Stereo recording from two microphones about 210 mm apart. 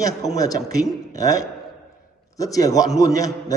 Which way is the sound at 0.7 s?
15° left (ahead or behind).